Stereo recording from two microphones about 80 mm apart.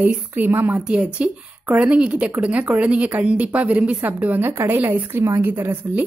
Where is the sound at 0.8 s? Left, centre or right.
Centre.